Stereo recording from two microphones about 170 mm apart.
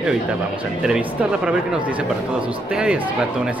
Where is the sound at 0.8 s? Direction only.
5° right (ahead or behind).